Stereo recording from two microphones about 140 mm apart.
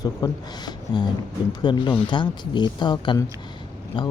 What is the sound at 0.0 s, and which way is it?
A man's voice, 30° left (ahead or behind).